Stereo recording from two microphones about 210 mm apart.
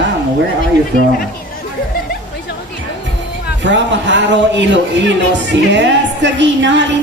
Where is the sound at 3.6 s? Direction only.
60° right (ahead or behind).